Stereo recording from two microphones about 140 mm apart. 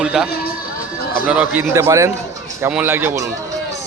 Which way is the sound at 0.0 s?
5° right (ahead or behind).